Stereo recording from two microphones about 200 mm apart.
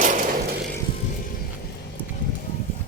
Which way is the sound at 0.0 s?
40° right (ahead or behind).